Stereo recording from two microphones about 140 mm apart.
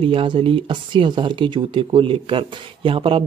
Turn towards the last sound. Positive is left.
turn(degrees=-40)  # may be behind; listen again after turning